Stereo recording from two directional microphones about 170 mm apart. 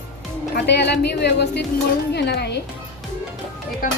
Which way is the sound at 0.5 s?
90° left.